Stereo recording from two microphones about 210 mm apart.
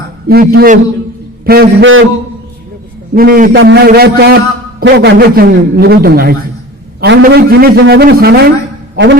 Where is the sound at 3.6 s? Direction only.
55° right (ahead or behind).